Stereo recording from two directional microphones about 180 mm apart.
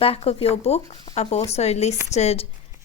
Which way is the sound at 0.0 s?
35° left (ahead or behind).